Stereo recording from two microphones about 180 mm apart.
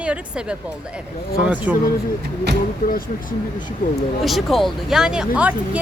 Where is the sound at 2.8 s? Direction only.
50° left (ahead or behind).